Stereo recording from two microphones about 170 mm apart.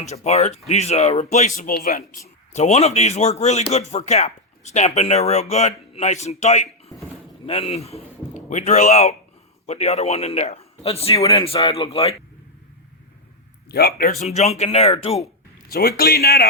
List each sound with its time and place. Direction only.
0.0 s a man's voice: 40° left (ahead or behind)
13.7 s speech: 70° left (ahead or behind)
14.2 s speech: 40° left (ahead or behind)
15.7 s a man's voice: 65° left (ahead or behind)